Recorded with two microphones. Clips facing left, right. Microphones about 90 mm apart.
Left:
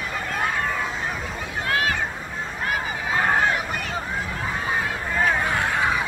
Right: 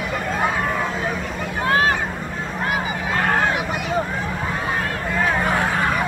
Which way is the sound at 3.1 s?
5° left (ahead or behind).